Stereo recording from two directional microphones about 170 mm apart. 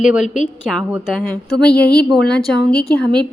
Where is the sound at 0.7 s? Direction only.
Centre (ahead or behind).